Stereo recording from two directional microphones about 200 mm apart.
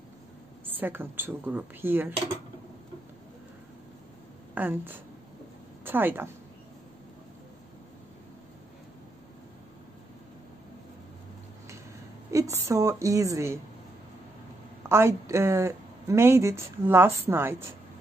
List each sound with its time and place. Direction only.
0.7 s speech: 10° right (ahead or behind)
4.6 s speech: 10° right (ahead or behind)
12.3 s a woman's voice: 15° right (ahead or behind)
14.9 s speech: 15° right (ahead or behind)